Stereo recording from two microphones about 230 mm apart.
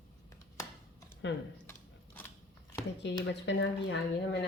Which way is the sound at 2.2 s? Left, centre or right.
Centre.